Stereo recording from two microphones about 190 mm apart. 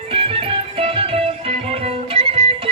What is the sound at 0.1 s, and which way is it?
Music, 30° right (ahead or behind).